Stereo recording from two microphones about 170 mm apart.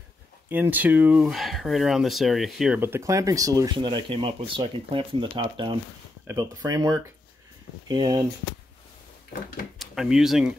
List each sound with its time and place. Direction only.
0.5 s speech: 10° right (ahead or behind); by 8.2 s 25° right (ahead or behind)
9.8 s speech: 5° right (ahead or behind)